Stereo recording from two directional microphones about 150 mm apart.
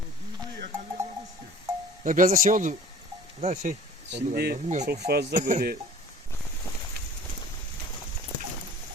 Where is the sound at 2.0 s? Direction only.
60° right (ahead or behind).